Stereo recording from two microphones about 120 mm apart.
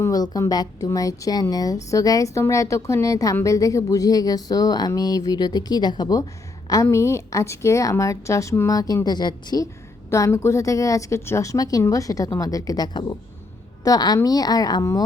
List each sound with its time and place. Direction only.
0.0 s a woman's voice: 30° left (ahead or behind)
6.8 s a woman's voice: 25° left (ahead or behind)
10.1 s a woman's voice: 25° left (ahead or behind)